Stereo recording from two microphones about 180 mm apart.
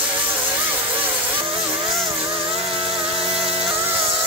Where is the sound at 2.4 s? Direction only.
30° right (ahead or behind).